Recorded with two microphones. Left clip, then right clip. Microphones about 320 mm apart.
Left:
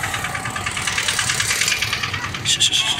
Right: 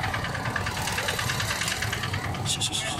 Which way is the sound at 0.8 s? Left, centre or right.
Right.